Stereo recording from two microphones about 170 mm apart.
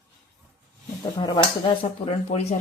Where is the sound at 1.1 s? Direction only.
25° left (ahead or behind).